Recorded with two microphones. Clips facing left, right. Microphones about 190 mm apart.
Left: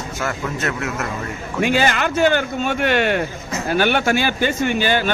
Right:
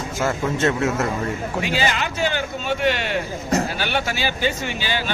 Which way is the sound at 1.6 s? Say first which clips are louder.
Left 7 dB; 50° left (ahead or behind).